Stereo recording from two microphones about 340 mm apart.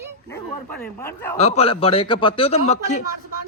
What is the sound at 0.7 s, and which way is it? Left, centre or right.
Speech, centre.